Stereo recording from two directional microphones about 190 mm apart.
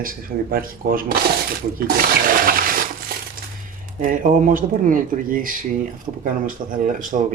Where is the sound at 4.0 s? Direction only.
40° right (ahead or behind).